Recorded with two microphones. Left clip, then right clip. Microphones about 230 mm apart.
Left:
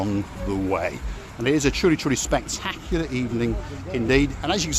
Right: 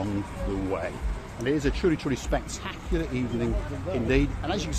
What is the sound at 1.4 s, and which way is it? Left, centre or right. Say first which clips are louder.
Speech: left 5 dB; left.